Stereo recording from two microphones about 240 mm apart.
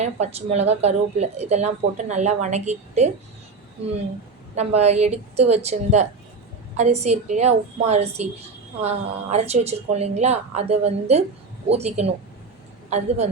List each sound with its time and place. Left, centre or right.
0.0 s a woman's voice: right
4.5 s a woman's voice: right